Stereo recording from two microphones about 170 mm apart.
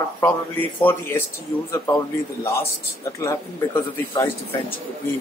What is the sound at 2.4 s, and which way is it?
A man's voice, 20° left (ahead or behind).